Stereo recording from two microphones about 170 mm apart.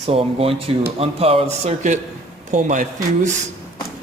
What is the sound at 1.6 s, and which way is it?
A man's voice, 45° right (ahead or behind).